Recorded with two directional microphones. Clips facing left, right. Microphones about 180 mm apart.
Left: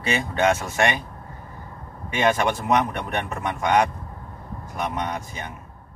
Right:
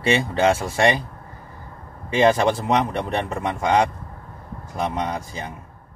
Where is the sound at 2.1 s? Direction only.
30° right (ahead or behind).